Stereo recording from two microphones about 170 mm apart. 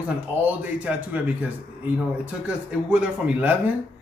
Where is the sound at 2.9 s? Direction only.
10° right (ahead or behind).